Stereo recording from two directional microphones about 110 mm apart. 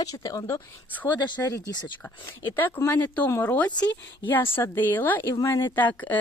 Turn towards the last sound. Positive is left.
turn(degrees=15)  # may be behind; listen again after turning